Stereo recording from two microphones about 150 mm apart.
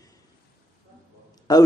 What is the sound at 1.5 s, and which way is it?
Speech, 25° left (ahead or behind).